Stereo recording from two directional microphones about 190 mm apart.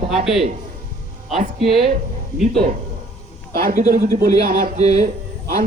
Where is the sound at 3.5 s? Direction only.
50° right (ahead or behind).